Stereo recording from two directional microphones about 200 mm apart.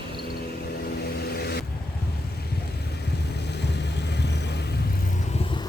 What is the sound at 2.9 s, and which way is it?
Vehicle, 55° left (ahead or behind).